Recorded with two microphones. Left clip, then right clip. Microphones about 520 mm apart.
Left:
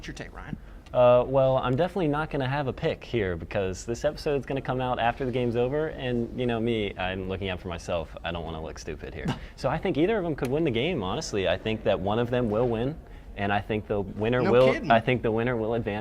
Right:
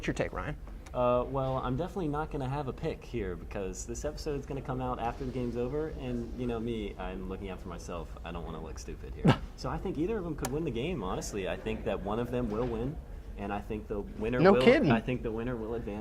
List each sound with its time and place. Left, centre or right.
0.9 s speech: left
9.6 s speech: left
14.6 s speech: right
14.8 s speech: left